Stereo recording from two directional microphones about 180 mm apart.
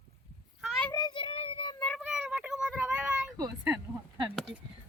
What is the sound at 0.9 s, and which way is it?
Child singing, 25° left (ahead or behind).